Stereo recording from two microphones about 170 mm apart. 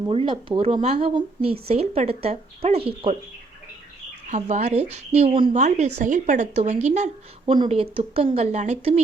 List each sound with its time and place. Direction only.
0.1 s speech: 30° right (ahead or behind)
4.3 s speech: 45° right (ahead or behind)
5.5 s speech: 45° right (ahead or behind)
7.4 s speech: 30° right (ahead or behind)